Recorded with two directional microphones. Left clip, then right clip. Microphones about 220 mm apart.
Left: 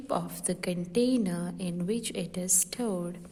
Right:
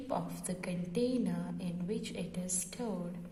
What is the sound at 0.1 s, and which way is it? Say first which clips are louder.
A woman's voice: left 7 dB; 45° left (ahead or behind).